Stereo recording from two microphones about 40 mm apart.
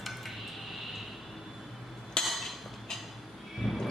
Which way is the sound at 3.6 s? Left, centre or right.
Centre.